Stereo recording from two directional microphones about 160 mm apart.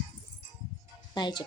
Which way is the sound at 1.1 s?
25° left (ahead or behind).